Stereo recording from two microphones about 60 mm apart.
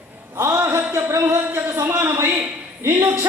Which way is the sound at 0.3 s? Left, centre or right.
Right.